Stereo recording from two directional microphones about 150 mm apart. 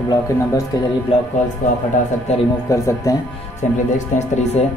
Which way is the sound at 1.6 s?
60° left (ahead or behind).